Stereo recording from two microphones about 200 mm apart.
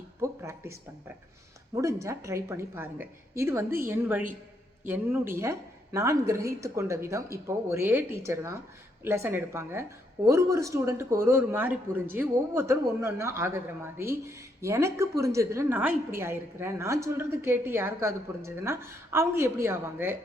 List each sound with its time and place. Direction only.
0.2 s speech: 15° right (ahead or behind)